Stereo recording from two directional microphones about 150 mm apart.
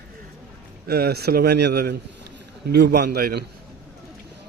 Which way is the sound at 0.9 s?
90° right.